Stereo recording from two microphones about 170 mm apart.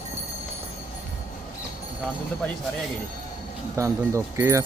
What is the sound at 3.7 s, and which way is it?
Speech, 15° right (ahead or behind).